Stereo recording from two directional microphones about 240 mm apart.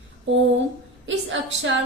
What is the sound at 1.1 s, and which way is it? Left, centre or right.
Speech, right.